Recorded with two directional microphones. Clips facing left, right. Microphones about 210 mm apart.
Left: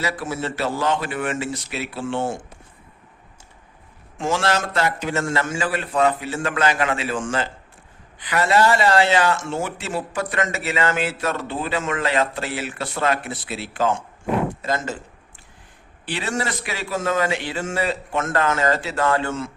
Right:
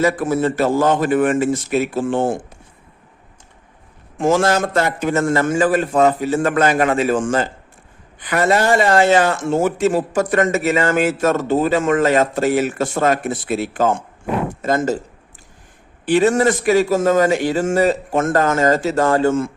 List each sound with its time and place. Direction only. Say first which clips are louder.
0.0 s speech: right 9 dB; 50° right (ahead or behind)
4.2 s speech: right 7 dB; 45° right (ahead or behind)
16.0 s speech: right 12 dB; 45° right (ahead or behind)